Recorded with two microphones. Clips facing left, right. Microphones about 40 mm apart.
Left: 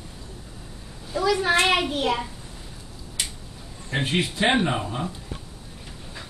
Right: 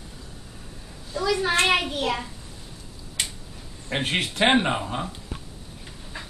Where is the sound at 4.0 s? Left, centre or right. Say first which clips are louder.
Even; right.